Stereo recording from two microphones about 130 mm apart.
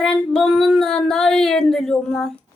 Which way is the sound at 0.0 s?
5° left (ahead or behind).